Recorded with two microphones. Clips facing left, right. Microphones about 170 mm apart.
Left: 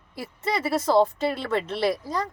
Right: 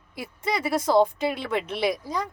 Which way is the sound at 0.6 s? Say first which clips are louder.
Even; 15° right (ahead or behind).